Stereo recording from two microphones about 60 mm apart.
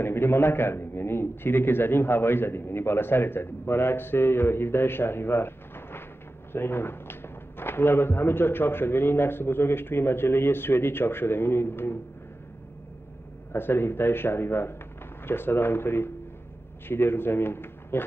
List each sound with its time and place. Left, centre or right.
0.0 s a man's voice: left
13.5 s a man's voice: left